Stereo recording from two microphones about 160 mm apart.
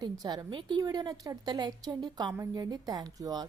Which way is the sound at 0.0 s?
25° right (ahead or behind).